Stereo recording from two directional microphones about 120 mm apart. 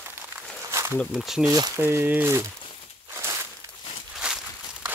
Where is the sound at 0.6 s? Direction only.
25° right (ahead or behind).